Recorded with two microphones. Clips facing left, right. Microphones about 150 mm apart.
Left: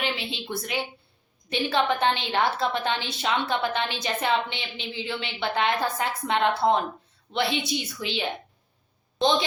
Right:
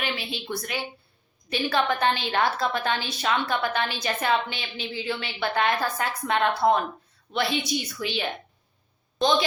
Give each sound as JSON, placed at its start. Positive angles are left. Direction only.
{"t": 0.0, "sound": "a woman's voice", "side_deg": 20}